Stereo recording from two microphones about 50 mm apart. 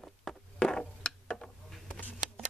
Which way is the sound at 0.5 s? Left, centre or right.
Centre.